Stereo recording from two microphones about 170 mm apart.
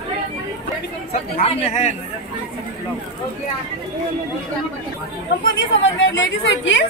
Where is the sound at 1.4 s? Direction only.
40° left (ahead or behind).